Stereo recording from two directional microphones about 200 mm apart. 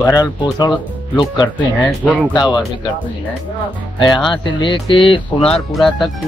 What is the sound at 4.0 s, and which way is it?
Speech, 25° left (ahead or behind).